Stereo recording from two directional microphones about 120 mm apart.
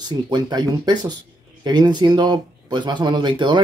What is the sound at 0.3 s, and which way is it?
Speech, 35° right (ahead or behind).